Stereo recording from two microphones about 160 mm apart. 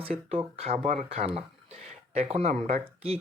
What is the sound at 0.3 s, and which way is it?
Speech, 40° right (ahead or behind).